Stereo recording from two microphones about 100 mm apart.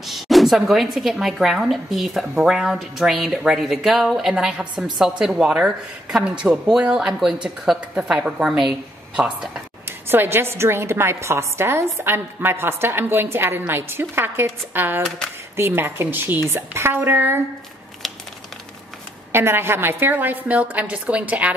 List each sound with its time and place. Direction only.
0.0 s speech: centre (ahead or behind)
9.8 s a woman's voice: 25° right (ahead or behind)
18.0 s crumpling: centre (ahead or behind)
19.3 s a woman's voice: 25° right (ahead or behind)